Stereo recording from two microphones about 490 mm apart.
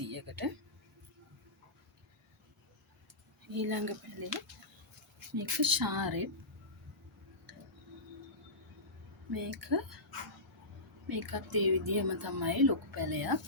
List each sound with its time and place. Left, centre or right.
0.0 s speech: right
3.5 s speech: right
5.4 s speech: right
9.3 s speech: right
11.1 s speech: right